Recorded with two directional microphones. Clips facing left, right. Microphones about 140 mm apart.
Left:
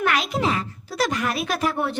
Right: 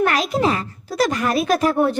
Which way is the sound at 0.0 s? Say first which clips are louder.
Right 4 dB; 40° right (ahead or behind).